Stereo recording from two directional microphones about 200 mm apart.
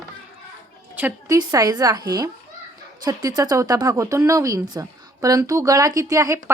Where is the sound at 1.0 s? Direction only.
10° right (ahead or behind).